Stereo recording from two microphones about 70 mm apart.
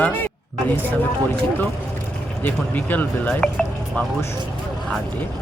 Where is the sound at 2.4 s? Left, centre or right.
Left.